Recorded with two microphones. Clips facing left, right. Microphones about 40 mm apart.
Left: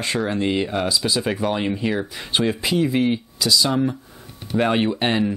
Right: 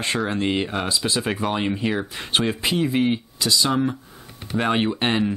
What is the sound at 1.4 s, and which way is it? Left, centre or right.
Speech, centre.